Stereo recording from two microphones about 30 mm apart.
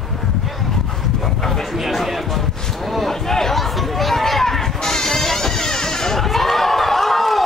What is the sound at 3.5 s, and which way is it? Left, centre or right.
Chatter, centre.